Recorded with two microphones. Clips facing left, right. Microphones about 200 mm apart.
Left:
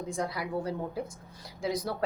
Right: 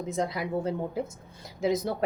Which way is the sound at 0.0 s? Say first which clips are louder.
Right 3 dB; 20° right (ahead or behind).